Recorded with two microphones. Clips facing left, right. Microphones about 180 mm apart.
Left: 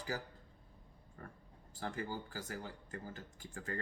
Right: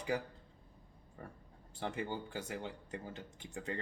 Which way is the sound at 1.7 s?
25° right (ahead or behind).